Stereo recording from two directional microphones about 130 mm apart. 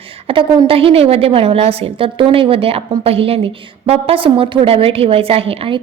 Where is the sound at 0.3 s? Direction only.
45° right (ahead or behind).